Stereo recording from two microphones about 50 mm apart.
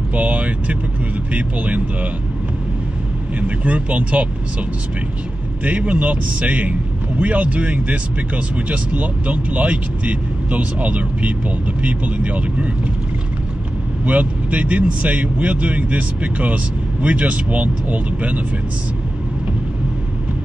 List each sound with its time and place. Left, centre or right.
0.1 s speech: right
3.3 s speech: right
5.6 s speech: right
14.0 s speech: right